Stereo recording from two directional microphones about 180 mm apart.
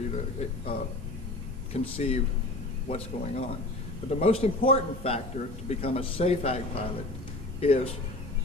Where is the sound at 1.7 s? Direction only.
35° left (ahead or behind).